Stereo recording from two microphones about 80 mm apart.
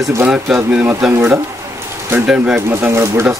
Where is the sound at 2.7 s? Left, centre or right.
Right.